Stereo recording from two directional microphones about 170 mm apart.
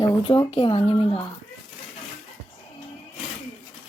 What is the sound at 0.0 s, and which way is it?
Speech, 30° left (ahead or behind).